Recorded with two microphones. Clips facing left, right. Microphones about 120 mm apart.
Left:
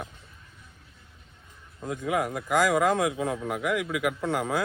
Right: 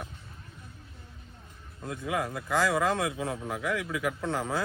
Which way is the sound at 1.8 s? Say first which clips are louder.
Left 4 dB; 20° left (ahead or behind).